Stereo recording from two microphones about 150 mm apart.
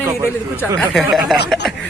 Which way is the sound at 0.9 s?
Centre (ahead or behind).